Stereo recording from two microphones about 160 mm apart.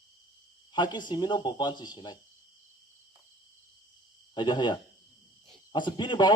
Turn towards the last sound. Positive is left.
turn(degrees=30)  # may be behind; listen again after turning